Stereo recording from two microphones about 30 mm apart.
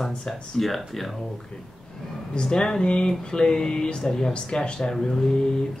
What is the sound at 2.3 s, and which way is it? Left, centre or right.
Speech, left.